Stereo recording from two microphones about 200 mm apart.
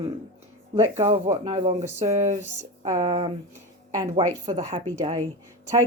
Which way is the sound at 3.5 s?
15° right (ahead or behind).